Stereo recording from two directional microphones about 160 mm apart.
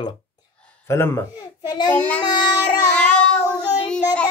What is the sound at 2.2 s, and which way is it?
Speech, 25° left (ahead or behind).